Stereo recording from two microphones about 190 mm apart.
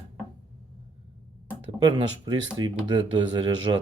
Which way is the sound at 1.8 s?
25° right (ahead or behind).